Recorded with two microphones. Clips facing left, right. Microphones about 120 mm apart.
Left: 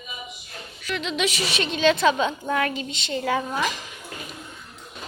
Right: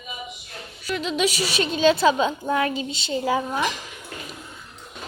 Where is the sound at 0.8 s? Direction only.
40° right (ahead or behind).